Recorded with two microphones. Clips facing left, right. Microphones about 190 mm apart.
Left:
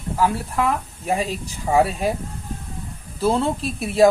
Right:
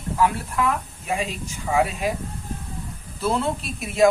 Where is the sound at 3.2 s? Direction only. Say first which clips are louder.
Left 4 dB; 30° left (ahead or behind).